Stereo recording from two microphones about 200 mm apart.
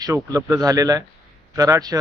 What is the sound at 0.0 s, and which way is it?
Speech, 15° right (ahead or behind).